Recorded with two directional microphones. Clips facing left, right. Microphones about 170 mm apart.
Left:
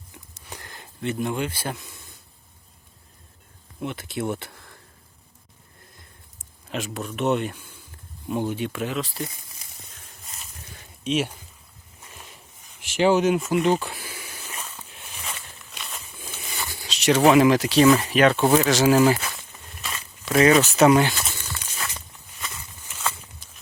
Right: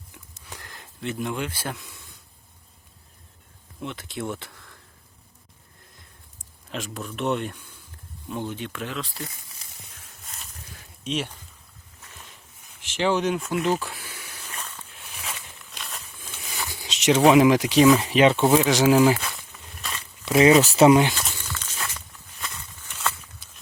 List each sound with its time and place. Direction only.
0.5 s speech: centre (ahead or behind)
3.8 s speech: 5° left (ahead or behind)
6.7 s speech: centre (ahead or behind)
10.2 s a sound: centre (ahead or behind)
16.8 s a sound: 20° right (ahead or behind)
17.2 s speech: 5° right (ahead or behind)
17.8 s speech: centre (ahead or behind)
18.1 s speech: 25° right (ahead or behind)
18.3 s speech: centre (ahead or behind)
19.1 s a sound: 5° left (ahead or behind)
20.2 s speech: 25° right (ahead or behind)
20.9 s speech: 15° right (ahead or behind)
21.2 s a sound: 5° left (ahead or behind)